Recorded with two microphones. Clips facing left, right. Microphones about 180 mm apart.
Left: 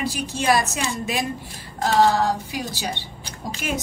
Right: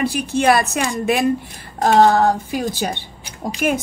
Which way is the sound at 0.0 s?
60° right (ahead or behind).